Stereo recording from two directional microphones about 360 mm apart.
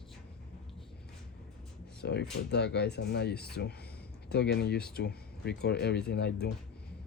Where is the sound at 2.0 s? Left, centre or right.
Left.